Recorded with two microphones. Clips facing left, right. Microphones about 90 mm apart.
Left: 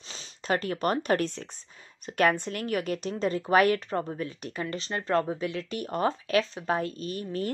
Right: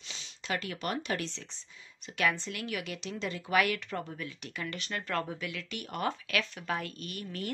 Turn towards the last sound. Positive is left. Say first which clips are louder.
# left 7 dB
turn(degrees=35)  # may be behind; listen again after turning